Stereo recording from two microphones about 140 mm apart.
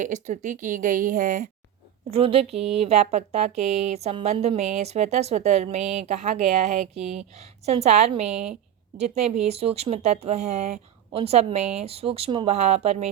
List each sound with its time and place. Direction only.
0.0 s speech: 60° right (ahead or behind)
2.0 s speech: 45° right (ahead or behind)